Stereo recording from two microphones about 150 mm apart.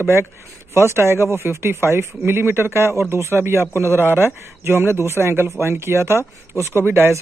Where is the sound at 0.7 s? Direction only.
20° right (ahead or behind).